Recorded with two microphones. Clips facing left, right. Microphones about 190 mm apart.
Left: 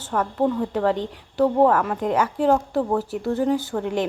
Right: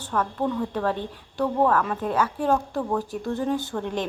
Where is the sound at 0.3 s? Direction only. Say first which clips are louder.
Left 4 dB; 20° left (ahead or behind).